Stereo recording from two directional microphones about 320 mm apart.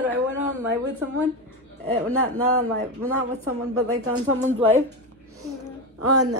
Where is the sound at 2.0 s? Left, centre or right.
Right.